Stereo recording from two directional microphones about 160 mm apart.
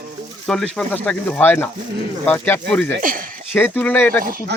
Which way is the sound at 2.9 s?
60° right (ahead or behind).